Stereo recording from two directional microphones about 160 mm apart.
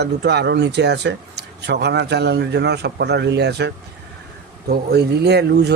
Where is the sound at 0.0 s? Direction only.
90° right.